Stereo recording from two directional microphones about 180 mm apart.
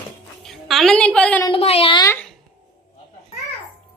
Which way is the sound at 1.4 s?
30° left (ahead or behind).